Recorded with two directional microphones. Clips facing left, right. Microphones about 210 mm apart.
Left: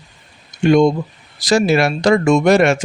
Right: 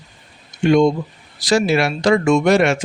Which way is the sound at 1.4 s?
45° left (ahead or behind).